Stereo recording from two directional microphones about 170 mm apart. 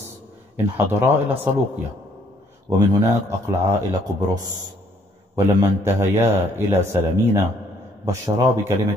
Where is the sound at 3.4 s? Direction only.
20° right (ahead or behind).